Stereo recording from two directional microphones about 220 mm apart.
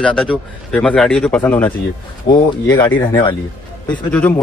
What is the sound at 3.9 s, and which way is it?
Speech, 5° left (ahead or behind).